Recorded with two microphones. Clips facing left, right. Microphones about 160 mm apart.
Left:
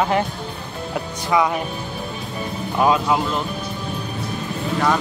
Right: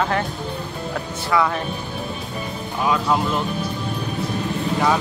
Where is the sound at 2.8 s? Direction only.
65° left (ahead or behind).